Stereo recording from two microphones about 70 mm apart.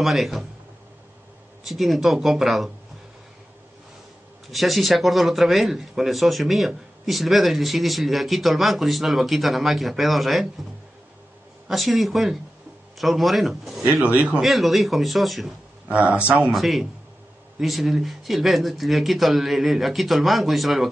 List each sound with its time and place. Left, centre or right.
0.0 s speech: centre
1.6 s speech: centre
4.5 s speech: centre
11.6 s speech: centre
15.9 s speech: centre
16.3 s speech: centre